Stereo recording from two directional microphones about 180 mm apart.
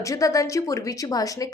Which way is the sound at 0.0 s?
20° left (ahead or behind).